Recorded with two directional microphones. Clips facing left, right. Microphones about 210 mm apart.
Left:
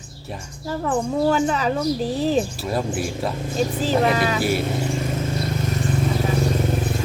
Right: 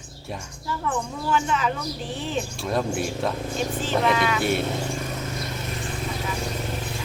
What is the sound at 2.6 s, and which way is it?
Speech, 5° left (ahead or behind).